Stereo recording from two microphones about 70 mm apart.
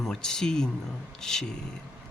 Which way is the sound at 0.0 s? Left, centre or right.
Centre.